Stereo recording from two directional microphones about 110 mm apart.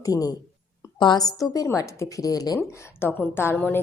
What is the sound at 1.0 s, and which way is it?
Speech, 45° left (ahead or behind).